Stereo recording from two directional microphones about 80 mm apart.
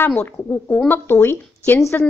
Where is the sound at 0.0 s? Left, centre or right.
Left.